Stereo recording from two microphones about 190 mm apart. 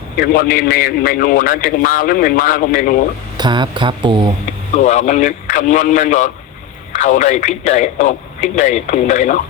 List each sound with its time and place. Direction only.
0.2 s a man's voice: 50° left (ahead or behind)
3.3 s speech: 25° right (ahead or behind)
4.7 s speech: 35° left (ahead or behind)